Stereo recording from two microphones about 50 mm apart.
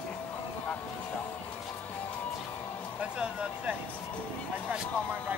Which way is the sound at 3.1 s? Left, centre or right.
Right.